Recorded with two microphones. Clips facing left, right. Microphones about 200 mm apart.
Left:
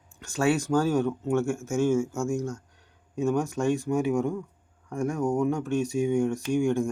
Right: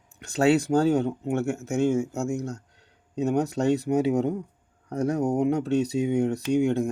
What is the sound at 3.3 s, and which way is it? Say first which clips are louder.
Speech: right 2 dB; 70° right (ahead or behind).